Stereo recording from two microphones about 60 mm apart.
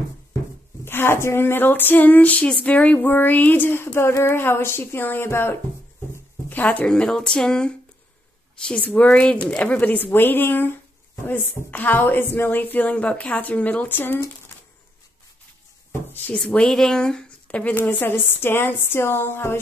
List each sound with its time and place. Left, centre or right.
0.8 s a woman's voice: left
3.7 s a woman's voice: left
6.5 s a woman's voice: left
6.9 s a woman's voice: centre; by 14.2 s left
16.4 s speech: centre
17.7 s a woman's voice: left